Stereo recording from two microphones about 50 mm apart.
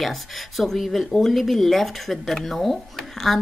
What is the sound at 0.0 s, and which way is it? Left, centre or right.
A woman's voice, centre.